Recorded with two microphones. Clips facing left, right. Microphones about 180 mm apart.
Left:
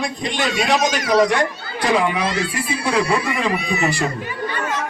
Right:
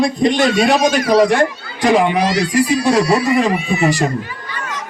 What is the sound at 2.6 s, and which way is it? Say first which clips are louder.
Speech: right 10 dB; 90° right.